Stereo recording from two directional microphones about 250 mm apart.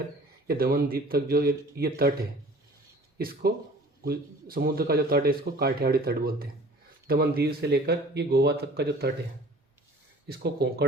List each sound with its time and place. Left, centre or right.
0.4 s a man's voice: right
3.2 s a man's voice: right
10.2 s a man's voice: right